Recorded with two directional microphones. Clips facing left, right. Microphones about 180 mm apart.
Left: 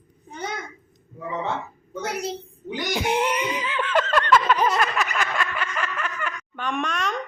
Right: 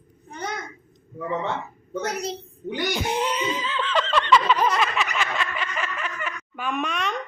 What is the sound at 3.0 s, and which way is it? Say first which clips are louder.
Laughter: left 2 dB; 15° left (ahead or behind).